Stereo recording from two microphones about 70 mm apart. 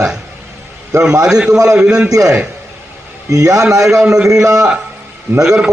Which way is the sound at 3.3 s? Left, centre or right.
Right.